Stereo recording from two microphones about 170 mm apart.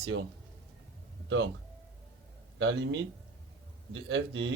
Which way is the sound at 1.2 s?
90° right.